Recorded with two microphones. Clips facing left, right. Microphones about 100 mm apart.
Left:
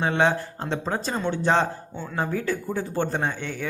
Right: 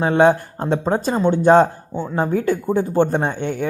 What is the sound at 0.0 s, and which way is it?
Speech, 40° right (ahead or behind).